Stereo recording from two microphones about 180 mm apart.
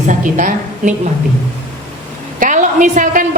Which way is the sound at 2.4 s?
45° right (ahead or behind).